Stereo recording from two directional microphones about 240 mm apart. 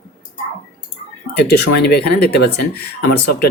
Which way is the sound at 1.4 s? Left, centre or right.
Left.